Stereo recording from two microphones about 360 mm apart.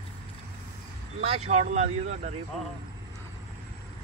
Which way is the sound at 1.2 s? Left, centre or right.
Centre.